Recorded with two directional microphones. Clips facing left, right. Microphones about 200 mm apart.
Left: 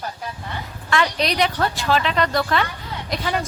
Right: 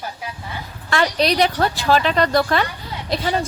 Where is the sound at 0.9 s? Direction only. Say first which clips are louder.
Right 3 dB; 35° right (ahead or behind).